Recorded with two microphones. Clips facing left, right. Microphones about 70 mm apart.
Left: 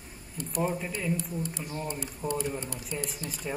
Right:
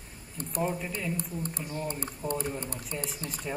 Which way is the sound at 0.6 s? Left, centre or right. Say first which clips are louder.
Left 1 dB; centre.